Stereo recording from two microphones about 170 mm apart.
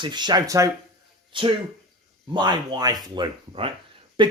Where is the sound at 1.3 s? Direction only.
30° right (ahead or behind).